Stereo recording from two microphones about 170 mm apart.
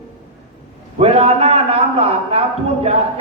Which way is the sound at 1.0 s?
35° right (ahead or behind).